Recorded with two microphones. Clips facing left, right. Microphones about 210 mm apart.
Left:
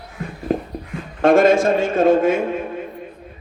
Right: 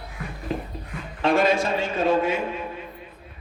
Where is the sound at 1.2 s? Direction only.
50° left (ahead or behind).